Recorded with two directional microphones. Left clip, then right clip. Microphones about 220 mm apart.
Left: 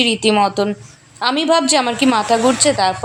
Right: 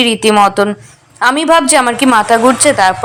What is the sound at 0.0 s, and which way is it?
A woman's voice, 10° right (ahead or behind).